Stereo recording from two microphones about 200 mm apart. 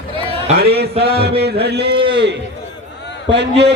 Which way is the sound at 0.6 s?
55° right (ahead or behind).